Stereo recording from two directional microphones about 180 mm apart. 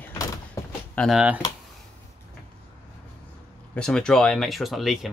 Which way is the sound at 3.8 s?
5° left (ahead or behind).